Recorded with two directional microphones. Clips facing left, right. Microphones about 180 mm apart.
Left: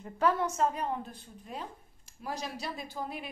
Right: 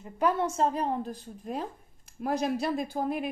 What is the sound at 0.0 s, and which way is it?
Speech, 20° right (ahead or behind).